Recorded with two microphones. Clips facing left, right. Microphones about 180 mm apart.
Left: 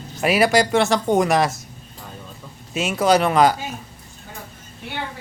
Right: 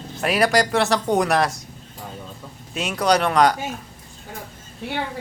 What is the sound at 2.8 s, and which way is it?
Speech, 5° left (ahead or behind).